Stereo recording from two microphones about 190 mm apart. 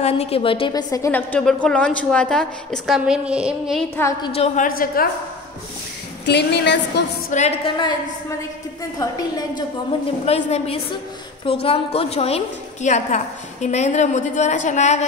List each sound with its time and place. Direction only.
0.0 s a woman's voice: 30° left (ahead or behind); by 3.8 s 5° right (ahead or behind)
3.9 s a woman's voice: 15° left (ahead or behind)
4.3 s a woman's voice: 30° left (ahead or behind)
4.6 s a woman's voice: 50° left (ahead or behind)
6.2 s a woman's voice: 60° left (ahead or behind)
7.2 s a woman's voice: 35° left (ahead or behind)
9.0 s a woman's voice: 20° left (ahead or behind)
10.2 s a woman's voice: 35° left (ahead or behind)